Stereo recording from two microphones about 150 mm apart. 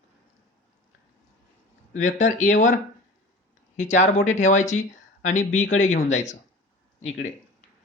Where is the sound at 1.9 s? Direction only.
55° left (ahead or behind).